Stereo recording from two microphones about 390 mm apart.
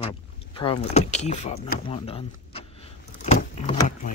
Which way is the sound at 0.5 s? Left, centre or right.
Centre.